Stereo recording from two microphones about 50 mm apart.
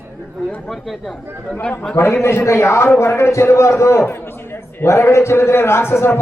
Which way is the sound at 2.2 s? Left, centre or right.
Left.